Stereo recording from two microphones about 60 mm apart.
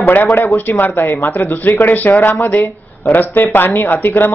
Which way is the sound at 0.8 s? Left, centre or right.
Left.